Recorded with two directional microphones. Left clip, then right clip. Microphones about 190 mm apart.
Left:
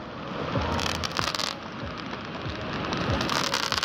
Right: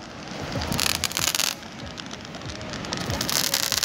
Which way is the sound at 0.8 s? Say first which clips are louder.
Right 3 dB; 45° left (ahead or behind).